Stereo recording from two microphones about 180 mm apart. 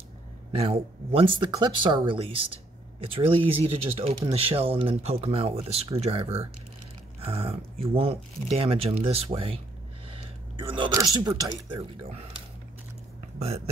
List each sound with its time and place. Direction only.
0.6 s speech: 30° right (ahead or behind)
10.9 s speech: 20° right (ahead or behind)